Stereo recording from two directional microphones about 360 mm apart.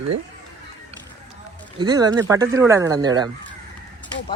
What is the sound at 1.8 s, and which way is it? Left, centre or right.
Speech, centre.